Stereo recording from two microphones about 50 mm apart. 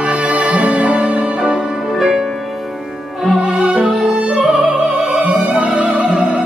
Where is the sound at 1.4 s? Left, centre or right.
Centre.